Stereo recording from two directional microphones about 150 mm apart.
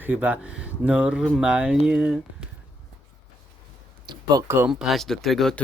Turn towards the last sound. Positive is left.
turn(degrees=0)  # may be behind; listen again after turning